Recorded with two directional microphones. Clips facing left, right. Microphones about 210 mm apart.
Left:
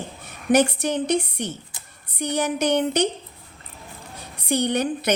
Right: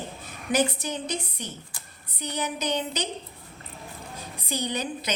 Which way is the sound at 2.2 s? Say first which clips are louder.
Left 8 dB; 75° left (ahead or behind).